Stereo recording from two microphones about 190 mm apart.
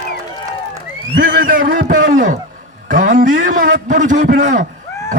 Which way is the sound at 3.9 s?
40° right (ahead or behind).